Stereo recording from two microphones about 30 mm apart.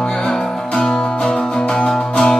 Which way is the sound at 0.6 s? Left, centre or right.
Left.